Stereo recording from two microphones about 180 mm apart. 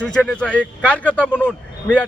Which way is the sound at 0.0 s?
5° left (ahead or behind).